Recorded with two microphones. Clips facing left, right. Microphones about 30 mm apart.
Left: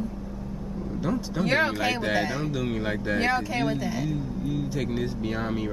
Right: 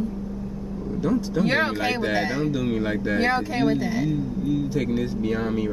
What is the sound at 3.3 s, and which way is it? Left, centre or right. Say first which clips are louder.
Speech: right 4 dB; centre.